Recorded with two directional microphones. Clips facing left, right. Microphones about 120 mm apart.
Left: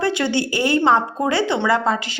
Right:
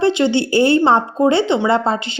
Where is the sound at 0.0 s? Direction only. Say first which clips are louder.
Right 5 dB; 20° right (ahead or behind).